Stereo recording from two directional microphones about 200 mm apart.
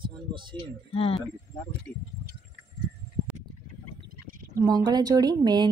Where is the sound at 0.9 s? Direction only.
30° left (ahead or behind).